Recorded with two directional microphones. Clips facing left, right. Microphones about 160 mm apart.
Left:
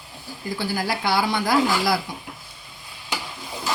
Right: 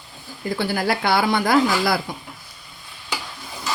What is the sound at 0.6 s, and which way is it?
Speech, 60° right (ahead or behind).